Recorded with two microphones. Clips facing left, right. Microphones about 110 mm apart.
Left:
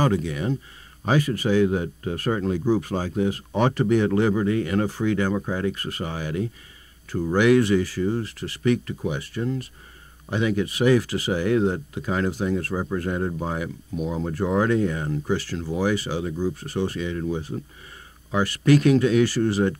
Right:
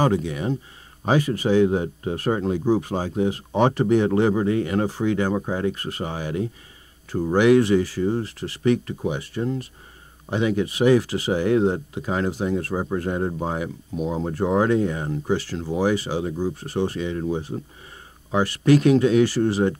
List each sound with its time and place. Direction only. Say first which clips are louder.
0.0 s speech: right 1 dB; 25° right (ahead or behind)